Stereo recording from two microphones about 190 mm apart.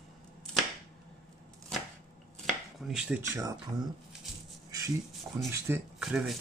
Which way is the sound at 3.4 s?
15° right (ahead or behind).